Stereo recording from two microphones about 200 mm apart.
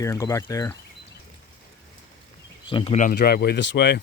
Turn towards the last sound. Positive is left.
turn(degrees=60)  # may be behind; listen again after turning